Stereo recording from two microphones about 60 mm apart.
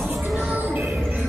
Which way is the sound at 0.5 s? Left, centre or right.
Right.